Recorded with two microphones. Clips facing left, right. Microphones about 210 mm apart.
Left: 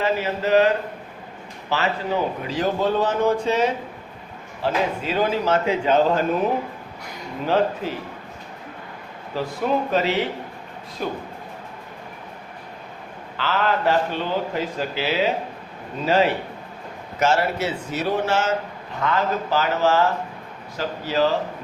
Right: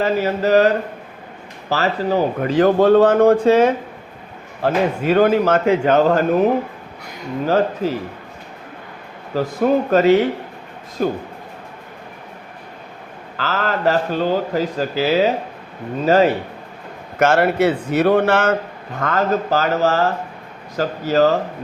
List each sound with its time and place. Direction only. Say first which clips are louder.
0.0 s a man's voice: right 5 dB; 40° right (ahead or behind)
1.7 s a man's voice: right 5 dB; 40° right (ahead or behind)
2.4 s speech: right 9 dB; 55° right (ahead or behind)
7.4 s a man's voice: right 3 dB; 40° right (ahead or behind)
9.3 s speech: right 6 dB; 45° right (ahead or behind)
13.3 s a man's voice: right 1 dB; 40° right (ahead or behind)
17.2 s speech: right 6 dB; 55° right (ahead or behind)
18.9 s speech: right 4 dB; 50° right (ahead or behind)